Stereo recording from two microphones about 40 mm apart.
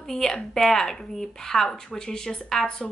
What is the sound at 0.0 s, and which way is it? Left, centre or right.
A woman's voice, centre.